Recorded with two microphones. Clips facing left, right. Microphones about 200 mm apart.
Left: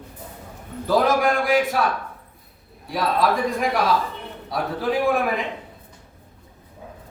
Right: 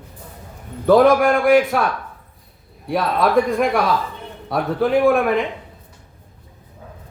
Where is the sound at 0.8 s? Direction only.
60° right (ahead or behind).